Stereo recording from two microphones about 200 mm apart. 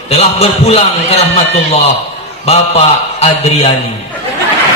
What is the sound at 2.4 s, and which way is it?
A man's voice, 30° left (ahead or behind).